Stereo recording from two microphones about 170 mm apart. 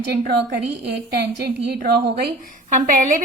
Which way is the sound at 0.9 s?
75° right (ahead or behind).